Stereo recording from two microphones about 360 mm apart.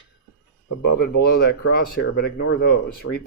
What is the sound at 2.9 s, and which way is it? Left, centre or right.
Speech, left.